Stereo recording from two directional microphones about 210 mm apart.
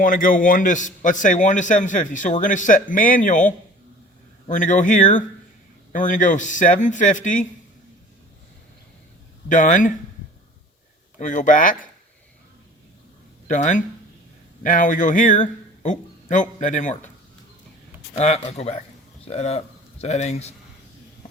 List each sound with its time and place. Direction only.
0.0 s a man's voice: 40° left (ahead or behind)
9.5 s a man's voice: 40° left (ahead or behind)
11.2 s a man's voice: 35° left (ahead or behind)
13.5 s a man's voice: 35° left (ahead or behind)
18.2 s a man's voice: 35° left (ahead or behind)